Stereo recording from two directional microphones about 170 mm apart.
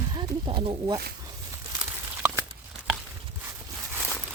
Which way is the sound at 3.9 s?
10° right (ahead or behind).